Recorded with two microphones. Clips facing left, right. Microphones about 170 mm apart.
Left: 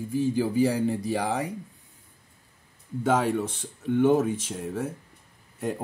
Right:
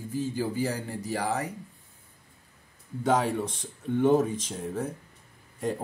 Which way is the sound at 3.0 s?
5° left (ahead or behind).